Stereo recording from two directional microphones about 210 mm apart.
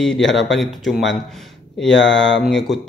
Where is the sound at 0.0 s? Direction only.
Centre (ahead or behind).